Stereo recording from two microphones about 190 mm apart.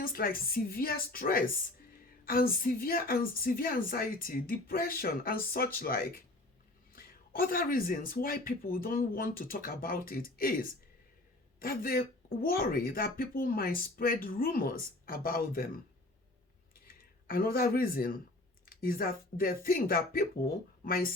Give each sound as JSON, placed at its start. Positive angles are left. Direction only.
{"t": 0.0, "sound": "a woman's voice", "side_deg": 50}
{"t": 16.7, "sound": "a sound", "side_deg": 50}
{"t": 18.6, "sound": "a woman's voice", "side_deg": 50}